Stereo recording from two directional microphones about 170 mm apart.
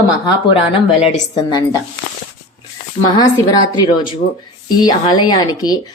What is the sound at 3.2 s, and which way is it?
Speech, 25° left (ahead or behind).